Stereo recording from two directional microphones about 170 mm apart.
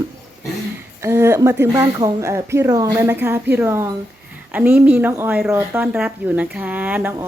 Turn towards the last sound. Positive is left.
turn(degrees=-10)  # may be behind; listen again after turning